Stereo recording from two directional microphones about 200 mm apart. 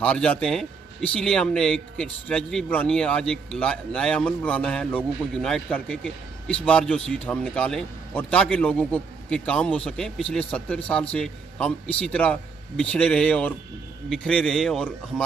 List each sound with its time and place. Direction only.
0.0 s speech: 5° left (ahead or behind)